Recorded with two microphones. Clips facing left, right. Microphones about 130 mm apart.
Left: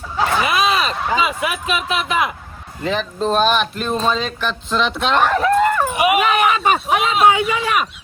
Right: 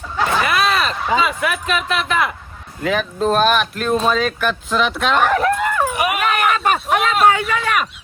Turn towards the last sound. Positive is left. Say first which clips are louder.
# left 1 dB
turn(degrees=0)  # may be behind; listen again after turning